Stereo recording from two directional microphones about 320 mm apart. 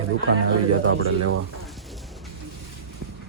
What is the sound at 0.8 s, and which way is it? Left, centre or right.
Speech, right.